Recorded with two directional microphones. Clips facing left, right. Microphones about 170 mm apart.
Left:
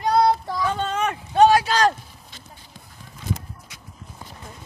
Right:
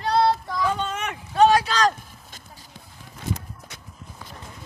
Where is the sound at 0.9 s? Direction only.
30° left (ahead or behind).